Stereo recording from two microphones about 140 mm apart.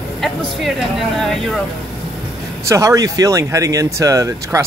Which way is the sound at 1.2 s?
Centre (ahead or behind).